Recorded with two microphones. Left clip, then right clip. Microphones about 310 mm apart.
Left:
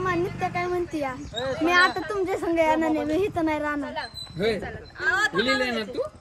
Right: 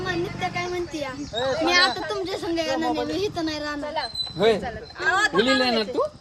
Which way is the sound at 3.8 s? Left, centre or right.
Right.